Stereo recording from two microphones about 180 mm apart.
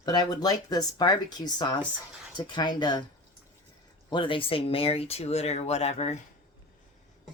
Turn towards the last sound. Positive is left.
turn(degrees=35)  # may be behind; listen again after turning